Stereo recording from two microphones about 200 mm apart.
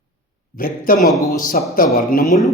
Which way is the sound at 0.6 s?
45° left (ahead or behind).